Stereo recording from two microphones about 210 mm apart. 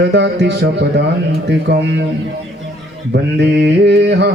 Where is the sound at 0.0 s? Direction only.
55° right (ahead or behind).